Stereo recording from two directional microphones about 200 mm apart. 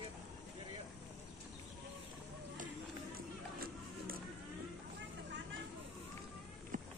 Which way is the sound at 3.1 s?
50° right (ahead or behind).